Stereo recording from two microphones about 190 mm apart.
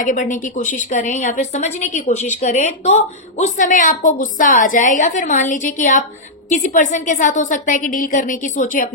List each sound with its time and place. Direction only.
0.0 s a woman's voice: 45° left (ahead or behind)